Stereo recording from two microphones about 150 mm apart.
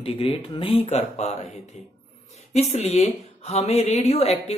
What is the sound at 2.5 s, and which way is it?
Speech, 45° left (ahead or behind).